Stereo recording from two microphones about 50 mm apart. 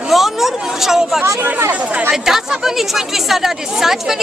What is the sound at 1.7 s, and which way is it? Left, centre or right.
Speech, right.